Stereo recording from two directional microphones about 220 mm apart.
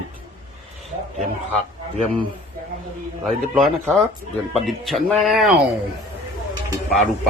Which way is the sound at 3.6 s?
Centre (ahead or behind).